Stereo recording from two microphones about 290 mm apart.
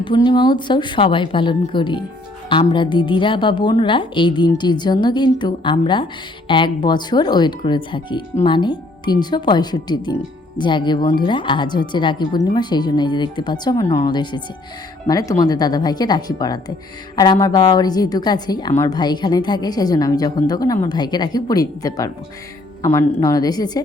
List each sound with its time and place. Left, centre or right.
0.0 s a woman's voice: centre